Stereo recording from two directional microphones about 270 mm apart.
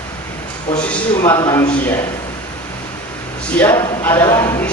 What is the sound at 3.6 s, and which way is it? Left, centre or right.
Speech, centre.